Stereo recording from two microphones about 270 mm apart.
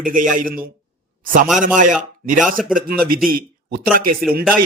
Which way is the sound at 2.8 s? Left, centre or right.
Right.